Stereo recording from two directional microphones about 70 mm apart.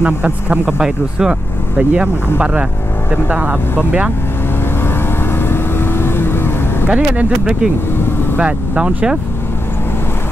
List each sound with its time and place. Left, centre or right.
0.0 s speech: centre
5.5 s vehicle: left
6.9 s speech: centre